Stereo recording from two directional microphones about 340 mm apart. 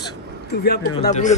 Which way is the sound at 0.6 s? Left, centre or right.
Left.